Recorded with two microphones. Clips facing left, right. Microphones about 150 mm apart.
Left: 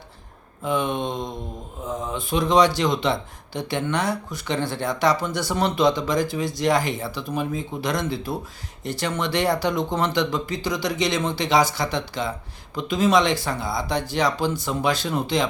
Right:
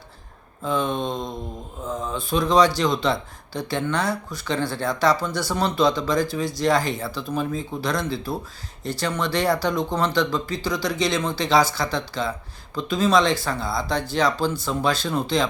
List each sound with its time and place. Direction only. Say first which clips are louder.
0.6 s speech: even; 20° left (ahead or behind)